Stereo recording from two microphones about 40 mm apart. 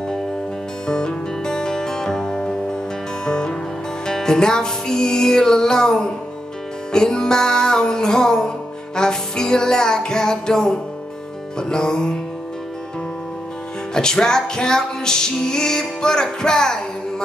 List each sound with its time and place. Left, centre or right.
0.8 s music: centre
13.9 s music: centre